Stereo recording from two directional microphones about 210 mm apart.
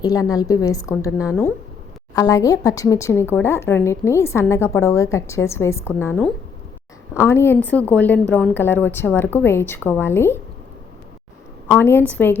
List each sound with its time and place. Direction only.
0.0 s speech: 15° left (ahead or behind)
11.7 s speech: 10° left (ahead or behind)